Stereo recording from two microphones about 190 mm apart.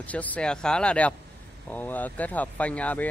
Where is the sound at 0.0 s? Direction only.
10° left (ahead or behind).